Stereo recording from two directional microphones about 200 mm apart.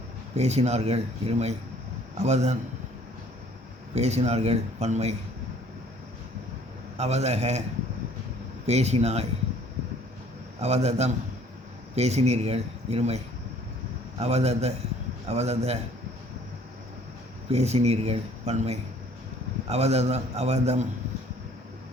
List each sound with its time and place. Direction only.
0.3 s speech: 35° right (ahead or behind)
3.9 s speech: 35° right (ahead or behind)
6.9 s speech: 35° right (ahead or behind)
8.6 s speech: 35° right (ahead or behind)
10.6 s speech: 30° right (ahead or behind)
17.5 s speech: 30° right (ahead or behind)